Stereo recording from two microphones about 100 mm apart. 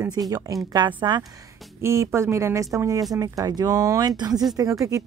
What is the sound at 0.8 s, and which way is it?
Speech, 50° right (ahead or behind).